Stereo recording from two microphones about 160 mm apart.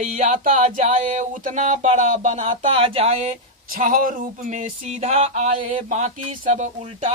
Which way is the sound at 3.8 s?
55° right (ahead or behind).